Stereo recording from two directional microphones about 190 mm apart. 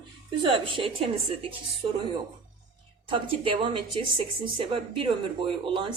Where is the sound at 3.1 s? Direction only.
25° right (ahead or behind).